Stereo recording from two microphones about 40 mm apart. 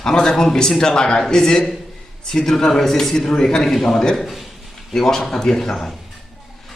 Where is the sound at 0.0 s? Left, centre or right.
Centre.